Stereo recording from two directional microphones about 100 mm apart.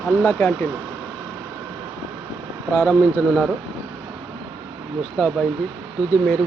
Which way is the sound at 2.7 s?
20° left (ahead or behind).